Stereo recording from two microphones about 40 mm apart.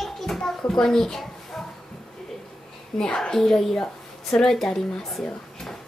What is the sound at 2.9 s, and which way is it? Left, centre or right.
Speech, centre.